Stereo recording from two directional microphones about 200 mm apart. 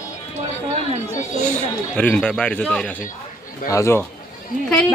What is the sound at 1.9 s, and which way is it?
Speech, 5° left (ahead or behind).